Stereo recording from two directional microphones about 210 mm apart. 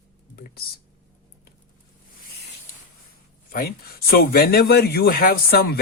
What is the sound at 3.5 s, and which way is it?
A man's voice, 45° left (ahead or behind).